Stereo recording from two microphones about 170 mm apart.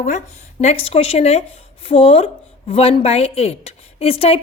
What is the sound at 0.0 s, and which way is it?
A woman's voice, 45° left (ahead or behind).